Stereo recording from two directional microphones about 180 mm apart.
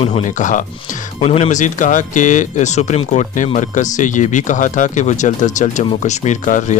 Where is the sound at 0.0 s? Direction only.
40° left (ahead or behind).